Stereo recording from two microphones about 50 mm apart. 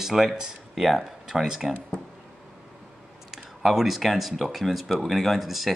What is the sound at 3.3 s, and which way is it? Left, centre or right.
Speech, centre.